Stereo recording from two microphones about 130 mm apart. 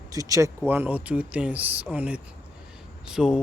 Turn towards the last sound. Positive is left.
turn(degrees=-5)  # may be behind; listen again after turning